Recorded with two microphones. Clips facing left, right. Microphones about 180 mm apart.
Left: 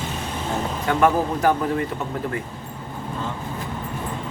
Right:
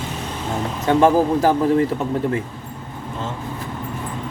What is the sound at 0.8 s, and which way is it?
Speech, 30° right (ahead or behind).